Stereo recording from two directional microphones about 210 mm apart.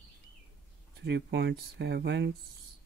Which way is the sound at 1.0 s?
55° right (ahead or behind).